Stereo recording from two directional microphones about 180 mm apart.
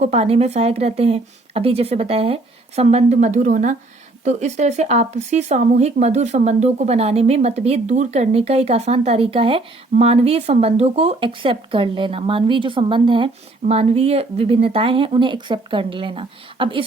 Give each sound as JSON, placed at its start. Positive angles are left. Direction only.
{"t": 0.0, "sound": "speech", "side_deg": -35}